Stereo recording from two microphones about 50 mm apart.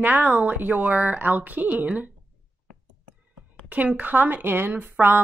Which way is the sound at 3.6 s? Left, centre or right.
Right.